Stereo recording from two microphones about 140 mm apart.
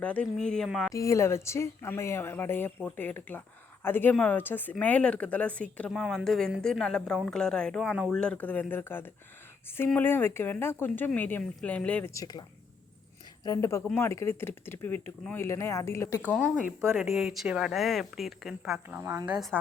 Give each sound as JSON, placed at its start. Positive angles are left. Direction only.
{"t": 0.0, "sound": "speech", "side_deg": 10}
{"t": 0.9, "sound": "speech", "side_deg": 20}
{"t": 8.1, "sound": "speech", "side_deg": 5}
{"t": 12.1, "sound": "speech", "side_deg": 30}
{"t": 17.2, "sound": "speech", "side_deg": -5}
{"t": 19.3, "sound": "speech", "side_deg": 0}